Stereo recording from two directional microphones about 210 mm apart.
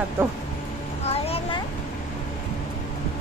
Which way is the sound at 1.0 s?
30° left (ahead or behind).